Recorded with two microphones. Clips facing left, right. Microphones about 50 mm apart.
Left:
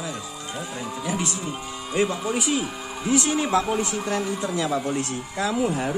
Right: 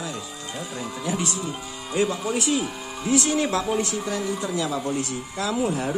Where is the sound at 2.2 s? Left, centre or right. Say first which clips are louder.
Even; centre.